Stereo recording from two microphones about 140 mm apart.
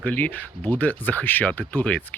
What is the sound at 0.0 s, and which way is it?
Speech, 10° left (ahead or behind).